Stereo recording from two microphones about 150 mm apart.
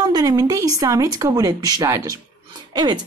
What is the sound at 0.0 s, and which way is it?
Speech, 25° right (ahead or behind).